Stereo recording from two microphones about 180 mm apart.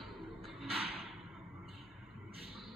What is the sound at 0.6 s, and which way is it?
Whip, 30° right (ahead or behind).